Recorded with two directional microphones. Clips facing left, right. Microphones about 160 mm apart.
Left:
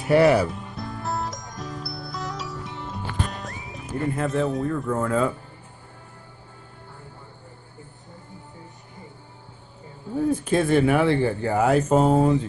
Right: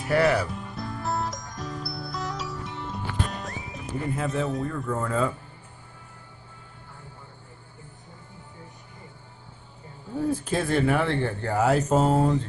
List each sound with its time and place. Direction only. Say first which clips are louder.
0.1 s speech: left 5 dB; 20° left (ahead or behind)
0.5 s music: left 1 dB; centre (ahead or behind)
10.3 s speech: left 6 dB; centre (ahead or behind)